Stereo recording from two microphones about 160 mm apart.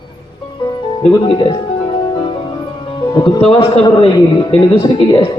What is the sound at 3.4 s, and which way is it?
A man's voice, 40° left (ahead or behind).